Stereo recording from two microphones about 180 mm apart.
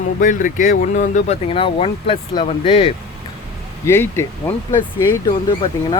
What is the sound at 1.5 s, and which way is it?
Speech, 30° left (ahead or behind).